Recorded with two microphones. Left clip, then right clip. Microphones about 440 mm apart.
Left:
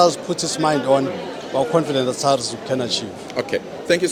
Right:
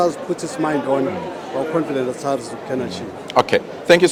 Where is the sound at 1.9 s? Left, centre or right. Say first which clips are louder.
Left 3 dB; left.